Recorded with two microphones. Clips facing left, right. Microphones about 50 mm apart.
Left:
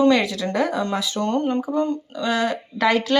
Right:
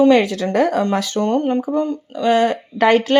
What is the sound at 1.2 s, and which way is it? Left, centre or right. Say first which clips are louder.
Speech: right 4 dB; right.